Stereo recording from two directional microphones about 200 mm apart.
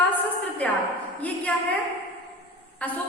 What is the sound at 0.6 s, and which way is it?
Speech, 10° left (ahead or behind).